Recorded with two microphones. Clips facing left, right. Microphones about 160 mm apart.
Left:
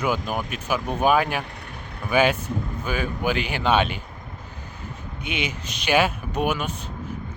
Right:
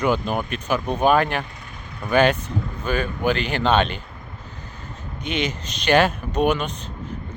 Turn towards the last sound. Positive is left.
turn(degrees=10)  # may be behind; listen again after turning